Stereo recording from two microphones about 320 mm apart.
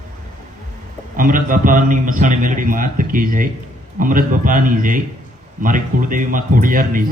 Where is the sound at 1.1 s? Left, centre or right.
Right.